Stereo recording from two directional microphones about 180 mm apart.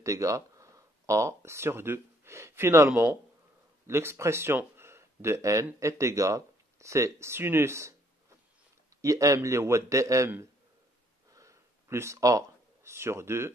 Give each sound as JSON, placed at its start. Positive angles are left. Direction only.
{"t": 0.0, "sound": "speech", "side_deg": -20}
{"t": 9.0, "sound": "speech", "side_deg": -20}
{"t": 11.3, "sound": "a sound", "side_deg": -15}